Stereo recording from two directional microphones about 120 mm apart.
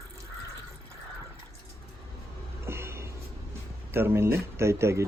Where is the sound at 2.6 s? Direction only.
20° right (ahead or behind).